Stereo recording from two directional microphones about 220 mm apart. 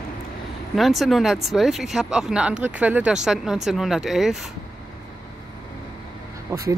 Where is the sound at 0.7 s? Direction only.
Centre (ahead or behind).